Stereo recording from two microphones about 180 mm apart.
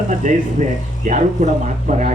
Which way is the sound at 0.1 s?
45° right (ahead or behind).